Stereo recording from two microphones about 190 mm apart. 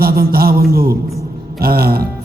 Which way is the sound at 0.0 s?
50° right (ahead or behind).